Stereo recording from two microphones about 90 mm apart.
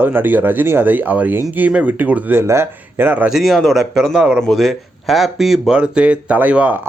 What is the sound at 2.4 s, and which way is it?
Speech, 30° right (ahead or behind).